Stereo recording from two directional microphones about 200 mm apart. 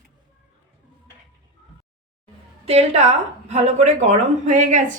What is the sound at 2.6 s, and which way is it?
A woman's voice, 30° right (ahead or behind).